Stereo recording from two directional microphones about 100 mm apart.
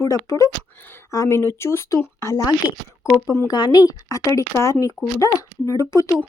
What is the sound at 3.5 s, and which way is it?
Speech, 45° left (ahead or behind).